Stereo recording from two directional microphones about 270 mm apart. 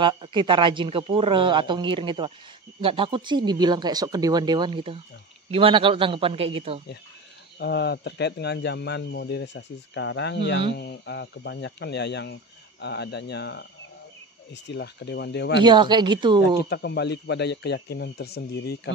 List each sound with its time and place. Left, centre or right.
0.0 s a man's voice: centre
7.5 s speech: left
15.6 s speech: centre
16.6 s speech: left